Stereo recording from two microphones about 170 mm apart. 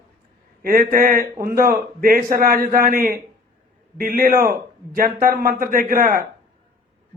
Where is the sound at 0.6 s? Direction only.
60° right (ahead or behind).